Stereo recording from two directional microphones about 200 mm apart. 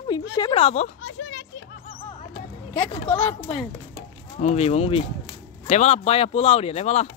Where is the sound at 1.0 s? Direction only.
70° left (ahead or behind).